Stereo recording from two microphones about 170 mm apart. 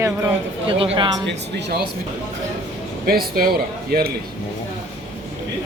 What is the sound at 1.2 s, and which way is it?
Speech, 90° right.